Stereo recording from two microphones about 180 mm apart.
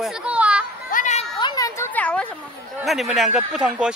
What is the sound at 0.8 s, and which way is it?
Music, 45° left (ahead or behind).